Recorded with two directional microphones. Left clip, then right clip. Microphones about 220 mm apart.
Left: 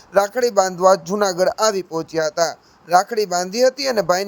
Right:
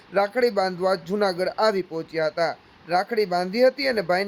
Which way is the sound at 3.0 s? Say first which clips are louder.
Left 3 dB; 15° left (ahead or behind).